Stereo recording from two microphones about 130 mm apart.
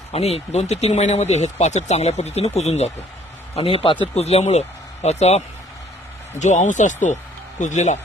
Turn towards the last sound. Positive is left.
turn(degrees=65)  # may be behind; listen again after turning